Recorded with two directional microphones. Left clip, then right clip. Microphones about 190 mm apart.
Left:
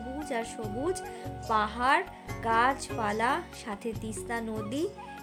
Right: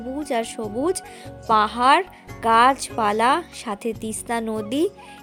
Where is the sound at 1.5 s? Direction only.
45° right (ahead or behind).